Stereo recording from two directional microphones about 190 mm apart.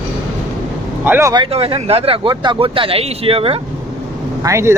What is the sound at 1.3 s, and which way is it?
Speech, 25° right (ahead or behind).